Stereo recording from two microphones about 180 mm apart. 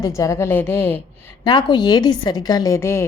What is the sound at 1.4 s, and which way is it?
A woman's voice, 25° left (ahead or behind).